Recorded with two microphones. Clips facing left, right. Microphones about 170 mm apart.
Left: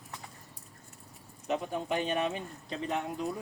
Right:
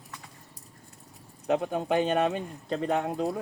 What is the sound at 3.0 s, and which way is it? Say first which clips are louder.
Speech: right 6 dB; 90° right.